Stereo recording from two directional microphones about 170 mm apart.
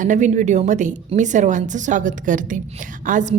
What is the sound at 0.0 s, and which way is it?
A woman's voice, 45° right (ahead or behind).